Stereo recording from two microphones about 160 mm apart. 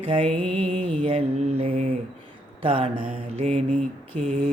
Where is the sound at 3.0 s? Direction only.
50° right (ahead or behind).